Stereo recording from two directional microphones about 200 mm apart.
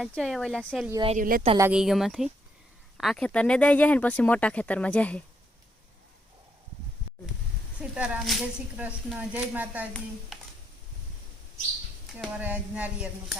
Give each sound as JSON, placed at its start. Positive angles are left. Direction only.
{"t": 0.0, "sound": "speech", "side_deg": 0}
{"t": 1.0, "sound": "speech", "side_deg": -40}
{"t": 1.5, "sound": "speech", "side_deg": -10}
{"t": 1.8, "sound": "speech", "side_deg": 0}
{"t": 7.8, "sound": "speech", "side_deg": -5}
{"t": 12.1, "sound": "speech", "side_deg": -5}